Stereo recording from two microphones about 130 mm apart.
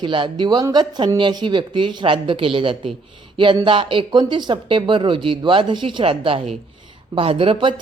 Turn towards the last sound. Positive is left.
turn(degrees=-40)  # may be behind; listen again after turning